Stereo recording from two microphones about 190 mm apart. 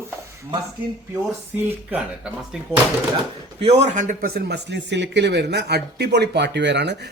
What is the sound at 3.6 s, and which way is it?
Speech, 35° right (ahead or behind).